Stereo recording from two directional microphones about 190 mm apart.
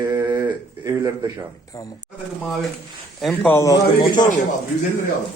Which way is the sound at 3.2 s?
5° left (ahead or behind).